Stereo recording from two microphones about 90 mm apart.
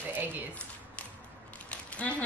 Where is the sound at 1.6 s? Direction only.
15° left (ahead or behind).